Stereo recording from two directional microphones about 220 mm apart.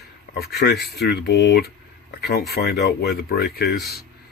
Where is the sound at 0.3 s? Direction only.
45° left (ahead or behind).